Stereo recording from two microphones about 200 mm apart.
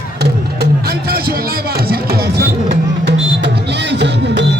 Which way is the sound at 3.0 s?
60° right (ahead or behind).